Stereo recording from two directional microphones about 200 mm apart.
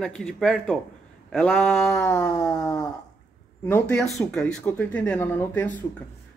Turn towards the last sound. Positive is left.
turn(degrees=10)  # may be behind; listen again after turning